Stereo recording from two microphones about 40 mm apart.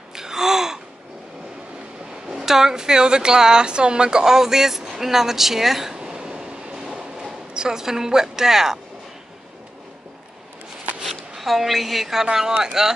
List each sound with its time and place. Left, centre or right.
0.1 s gasp: centre
2.3 s a woman's voice: centre
6.9 s a sound: centre
11.0 s speech: centre